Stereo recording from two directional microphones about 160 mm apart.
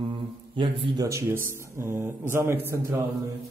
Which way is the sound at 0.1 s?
30° right (ahead or behind).